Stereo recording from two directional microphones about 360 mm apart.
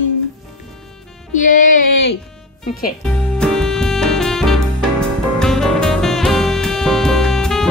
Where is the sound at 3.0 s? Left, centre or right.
Centre.